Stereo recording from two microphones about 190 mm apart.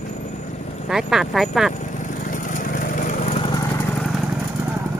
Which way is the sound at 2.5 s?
45° left (ahead or behind).